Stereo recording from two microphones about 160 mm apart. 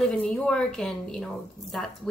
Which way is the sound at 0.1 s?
5° left (ahead or behind).